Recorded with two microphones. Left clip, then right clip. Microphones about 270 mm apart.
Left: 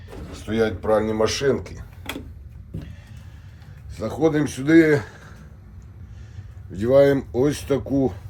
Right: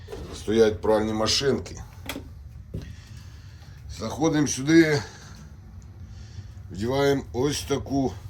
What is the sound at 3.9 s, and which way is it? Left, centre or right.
Speech, centre.